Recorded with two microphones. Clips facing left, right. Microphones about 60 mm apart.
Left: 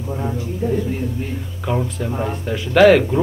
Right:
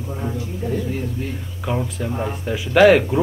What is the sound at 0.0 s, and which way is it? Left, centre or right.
Speech, centre.